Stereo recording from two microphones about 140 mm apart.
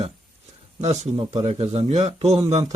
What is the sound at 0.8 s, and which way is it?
A man's voice, 50° right (ahead or behind).